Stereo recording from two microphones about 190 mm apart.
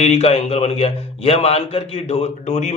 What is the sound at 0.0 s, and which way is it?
A man's voice, 35° left (ahead or behind).